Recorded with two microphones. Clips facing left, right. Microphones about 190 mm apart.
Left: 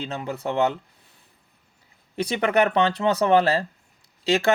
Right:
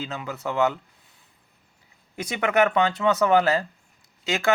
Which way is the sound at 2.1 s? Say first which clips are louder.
Left 1 dB; 35° left (ahead or behind).